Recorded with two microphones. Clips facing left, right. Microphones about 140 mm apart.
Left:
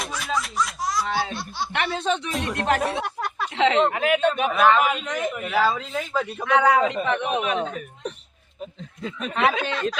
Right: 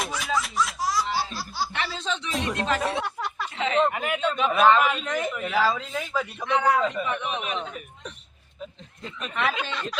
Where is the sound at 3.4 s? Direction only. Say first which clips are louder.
Left 4 dB; 90° left.